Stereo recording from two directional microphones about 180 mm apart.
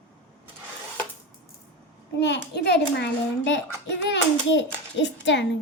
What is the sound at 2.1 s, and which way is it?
A child's voice, 70° left (ahead or behind).